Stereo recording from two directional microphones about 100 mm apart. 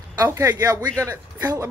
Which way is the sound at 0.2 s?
30° right (ahead or behind).